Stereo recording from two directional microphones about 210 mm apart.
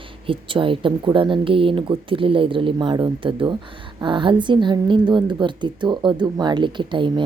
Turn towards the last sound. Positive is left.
turn(degrees=-20)  # may be behind; listen again after turning